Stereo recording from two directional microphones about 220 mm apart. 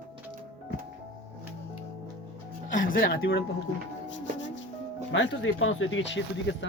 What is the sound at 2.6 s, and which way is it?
Music, 35° left (ahead or behind).